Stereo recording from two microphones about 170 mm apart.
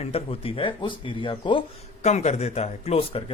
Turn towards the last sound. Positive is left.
turn(degrees=35)  # may be behind; listen again after turning